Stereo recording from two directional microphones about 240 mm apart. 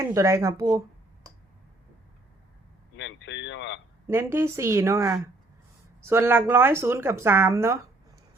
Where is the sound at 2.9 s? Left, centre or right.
Left.